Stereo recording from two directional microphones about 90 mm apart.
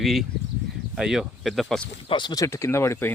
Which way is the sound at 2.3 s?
35° left (ahead or behind).